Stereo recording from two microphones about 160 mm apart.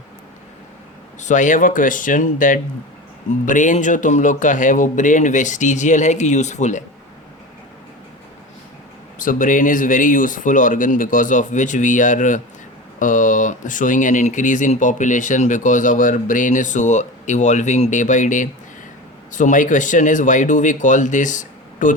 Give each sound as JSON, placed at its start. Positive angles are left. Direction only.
{"t": 1.2, "sound": "speech", "side_deg": 50}
{"t": 9.1, "sound": "speech", "side_deg": 55}